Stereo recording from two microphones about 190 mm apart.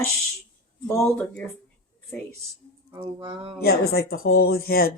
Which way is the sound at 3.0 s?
25° right (ahead or behind).